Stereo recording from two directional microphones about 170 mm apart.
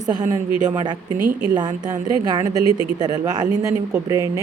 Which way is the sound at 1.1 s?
5° right (ahead or behind).